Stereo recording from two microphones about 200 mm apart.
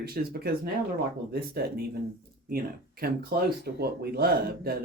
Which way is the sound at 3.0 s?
50° right (ahead or behind).